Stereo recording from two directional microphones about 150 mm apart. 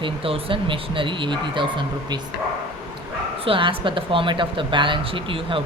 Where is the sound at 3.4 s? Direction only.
35° right (ahead or behind).